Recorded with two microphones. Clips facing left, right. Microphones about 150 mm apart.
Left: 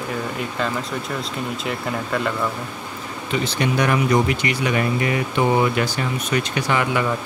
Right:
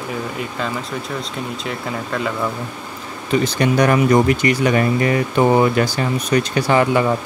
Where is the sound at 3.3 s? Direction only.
45° right (ahead or behind).